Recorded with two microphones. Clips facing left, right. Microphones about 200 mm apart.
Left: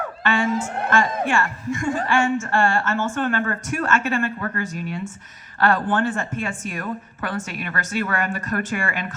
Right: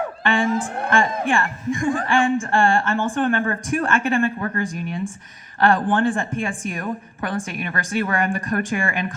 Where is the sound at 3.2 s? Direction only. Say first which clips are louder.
Right 2 dB; 30° right (ahead or behind).